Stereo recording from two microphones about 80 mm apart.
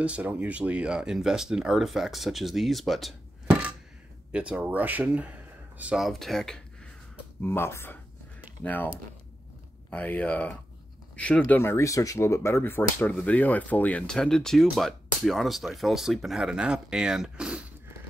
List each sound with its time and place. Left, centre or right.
0.0 s speech: centre
4.3 s speech: centre
5.9 s speech: centre
7.4 s speech: left
11.6 s speech: left; by 14.0 s centre
14.0 s speech: centre